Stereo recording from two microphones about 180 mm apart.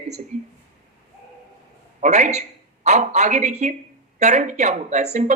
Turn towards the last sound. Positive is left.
turn(degrees=-40)  # may be behind; listen again after turning